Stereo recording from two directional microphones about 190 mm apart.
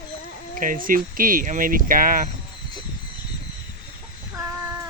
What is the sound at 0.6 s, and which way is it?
Speech, 45° right (ahead or behind).